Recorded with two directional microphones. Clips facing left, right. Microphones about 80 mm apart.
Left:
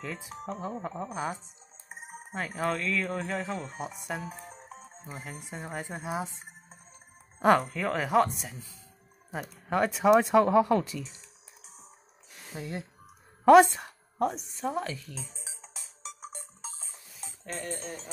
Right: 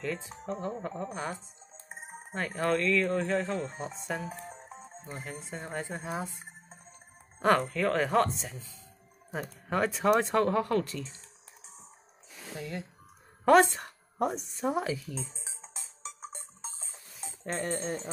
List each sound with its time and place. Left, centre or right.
0.0 s speech: centre
4.8 s music: centre
5.5 s speech: centre
7.3 s speech: centre
9.3 s speech: centre
12.5 s speech: left
13.7 s speech: centre
15.1 s speech: centre
15.6 s music: right
17.4 s speech: right